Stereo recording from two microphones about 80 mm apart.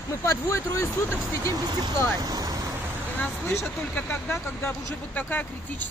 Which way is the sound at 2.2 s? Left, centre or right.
Right.